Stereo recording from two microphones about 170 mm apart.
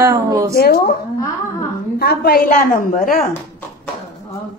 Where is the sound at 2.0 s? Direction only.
65° left (ahead or behind).